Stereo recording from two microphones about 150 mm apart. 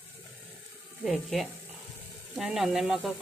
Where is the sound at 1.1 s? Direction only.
Centre (ahead or behind).